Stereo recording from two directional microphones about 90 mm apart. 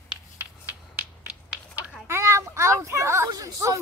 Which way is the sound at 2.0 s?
30° right (ahead or behind).